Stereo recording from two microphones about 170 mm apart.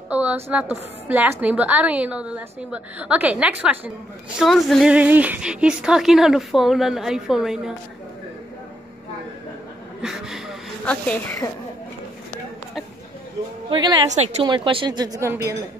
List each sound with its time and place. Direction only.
0.1 s a woman's voice: 10° right (ahead or behind)
10.9 s speech: 15° left (ahead or behind)
13.7 s a woman's voice: 25° right (ahead or behind)
14.1 s a woman's voice: 40° right (ahead or behind); by 15.5 s 15° right (ahead or behind)